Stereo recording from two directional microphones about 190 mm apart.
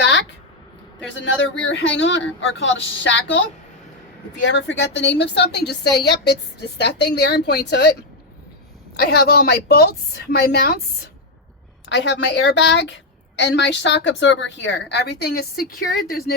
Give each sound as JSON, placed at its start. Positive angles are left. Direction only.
{"t": 0.0, "sound": "a sound", "side_deg": 70}
{"t": 1.2, "sound": "a woman's voice", "side_deg": 75}
{"t": 4.4, "sound": "a woman's voice", "side_deg": 70}
{"t": 9.0, "sound": "a woman's voice", "side_deg": 55}
{"t": 11.9, "sound": "a woman's voice", "side_deg": 65}